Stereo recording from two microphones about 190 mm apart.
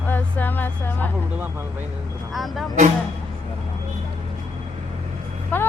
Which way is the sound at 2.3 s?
Centre (ahead or behind).